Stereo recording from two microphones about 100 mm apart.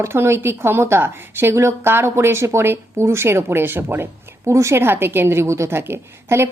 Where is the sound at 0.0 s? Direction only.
25° right (ahead or behind).